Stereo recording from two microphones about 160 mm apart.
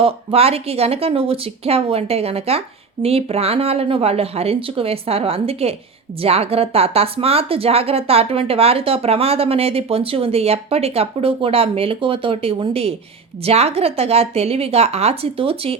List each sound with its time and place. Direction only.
0.0 s speech: 35° right (ahead or behind)